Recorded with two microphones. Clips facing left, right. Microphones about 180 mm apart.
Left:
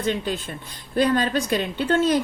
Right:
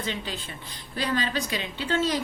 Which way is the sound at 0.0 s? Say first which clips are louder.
Left 8 dB; 50° left (ahead or behind).